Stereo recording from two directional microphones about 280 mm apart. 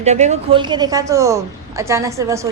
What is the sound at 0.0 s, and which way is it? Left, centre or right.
A woman's voice, right.